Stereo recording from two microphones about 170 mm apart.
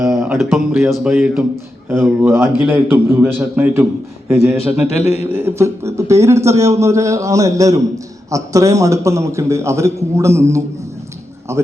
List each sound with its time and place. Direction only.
0.0 s a man's voice: 5° right (ahead or behind)